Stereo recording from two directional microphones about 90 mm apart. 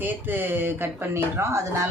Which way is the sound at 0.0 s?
20° right (ahead or behind).